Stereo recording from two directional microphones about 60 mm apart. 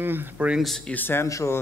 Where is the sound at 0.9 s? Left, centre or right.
Left.